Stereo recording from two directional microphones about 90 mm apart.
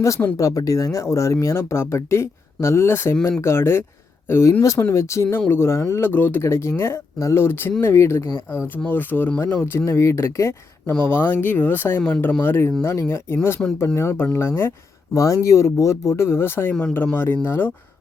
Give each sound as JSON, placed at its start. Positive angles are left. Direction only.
{"t": 0.0, "sound": "speech", "side_deg": 35}
{"t": 11.0, "sound": "speech", "side_deg": 20}
{"t": 12.4, "sound": "speech", "side_deg": 25}